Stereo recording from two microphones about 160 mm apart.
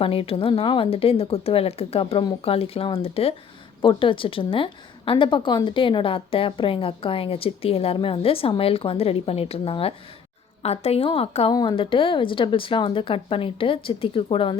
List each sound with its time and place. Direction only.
0.0 s a woman's voice: 35° left (ahead or behind)
11.5 s a woman's voice: 25° left (ahead or behind)